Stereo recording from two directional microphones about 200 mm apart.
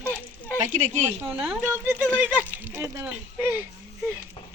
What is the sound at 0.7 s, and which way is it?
Speech, 35° right (ahead or behind).